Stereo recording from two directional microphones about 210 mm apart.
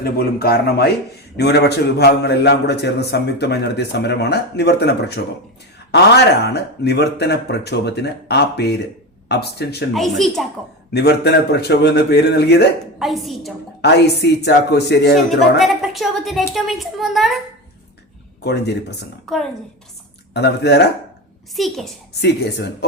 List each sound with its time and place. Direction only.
0.0 s a man's voice: 45° left (ahead or behind)
9.9 s a woman's voice: centre (ahead or behind)
10.9 s a man's voice: 50° left (ahead or behind)
13.0 s a woman's voice: centre (ahead or behind)
13.8 s a man's voice: 55° left (ahead or behind)
15.5 s a woman's voice: centre (ahead or behind)
18.4 s a man's voice: 50° left (ahead or behind)
19.2 s a woman's voice: centre (ahead or behind)
20.3 s a man's voice: 50° left (ahead or behind)
21.5 s a woman's voice: centre (ahead or behind)
22.2 s a man's voice: 50° left (ahead or behind)